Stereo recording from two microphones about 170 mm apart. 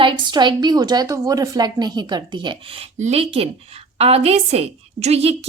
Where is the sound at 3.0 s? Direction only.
35° right (ahead or behind).